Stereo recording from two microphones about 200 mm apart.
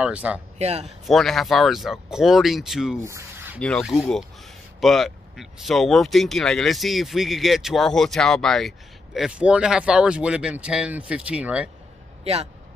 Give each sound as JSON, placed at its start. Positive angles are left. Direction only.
{"t": 0.0, "sound": "speech", "side_deg": -5}
{"t": 0.6, "sound": "speech", "side_deg": -30}
{"t": 1.0, "sound": "speech", "side_deg": 0}
{"t": 3.1, "sound": "a sound", "side_deg": -15}
{"t": 3.5, "sound": "speech", "side_deg": 5}